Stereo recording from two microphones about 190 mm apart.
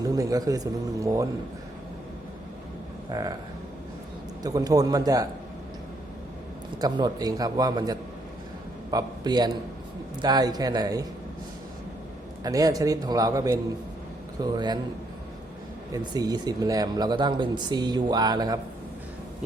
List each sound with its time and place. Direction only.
0.0 s speech: 20° right (ahead or behind)
3.1 s speech: 20° right (ahead or behind)
4.4 s speech: 20° right (ahead or behind)
6.8 s a man's voice: 20° right (ahead or behind)
12.4 s speech: 20° right (ahead or behind)
15.9 s speech: 20° right (ahead or behind)